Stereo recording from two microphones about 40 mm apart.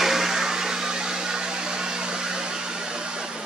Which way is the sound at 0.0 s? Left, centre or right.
Centre.